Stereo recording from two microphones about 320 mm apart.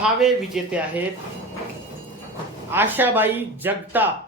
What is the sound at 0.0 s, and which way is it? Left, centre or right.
Speech, centre.